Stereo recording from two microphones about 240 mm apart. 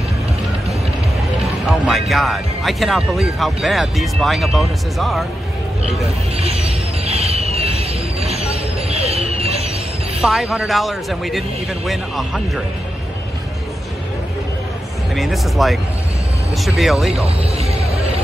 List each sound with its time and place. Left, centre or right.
1.7 s speech: centre
5.9 s speech: right
7.1 s vehicle: right
10.2 s speech: centre
15.1 s speech: centre
17.4 s a sound: right